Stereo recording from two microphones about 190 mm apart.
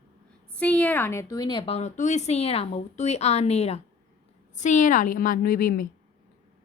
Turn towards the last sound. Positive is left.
turn(degrees=50)  # may be behind; listen again after turning